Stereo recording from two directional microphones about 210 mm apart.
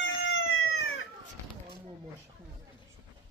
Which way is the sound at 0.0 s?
65° left (ahead or behind).